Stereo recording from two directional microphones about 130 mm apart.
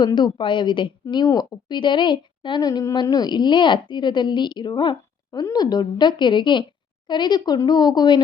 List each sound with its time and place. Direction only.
0.0 s a woman's voice: 35° left (ahead or behind)